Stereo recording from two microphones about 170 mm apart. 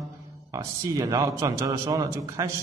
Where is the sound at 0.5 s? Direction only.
20° right (ahead or behind).